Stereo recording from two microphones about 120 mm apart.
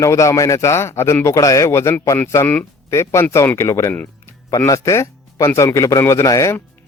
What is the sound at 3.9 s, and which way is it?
Music, 15° left (ahead or behind).